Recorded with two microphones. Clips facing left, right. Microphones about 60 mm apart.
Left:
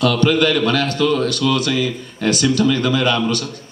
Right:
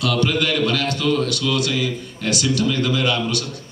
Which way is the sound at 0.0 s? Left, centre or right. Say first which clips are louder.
Left 5 dB; left.